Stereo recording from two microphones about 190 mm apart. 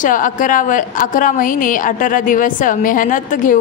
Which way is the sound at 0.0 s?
45° left (ahead or behind).